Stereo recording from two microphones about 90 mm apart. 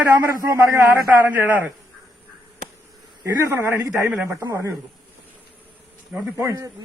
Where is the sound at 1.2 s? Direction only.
20° right (ahead or behind).